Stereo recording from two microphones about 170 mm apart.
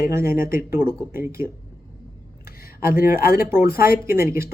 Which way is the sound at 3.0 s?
60° left (ahead or behind).